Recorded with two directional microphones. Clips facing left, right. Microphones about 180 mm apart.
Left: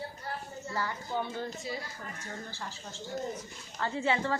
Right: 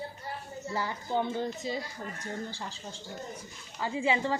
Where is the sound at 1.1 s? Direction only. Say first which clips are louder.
Right 8 dB; 20° right (ahead or behind).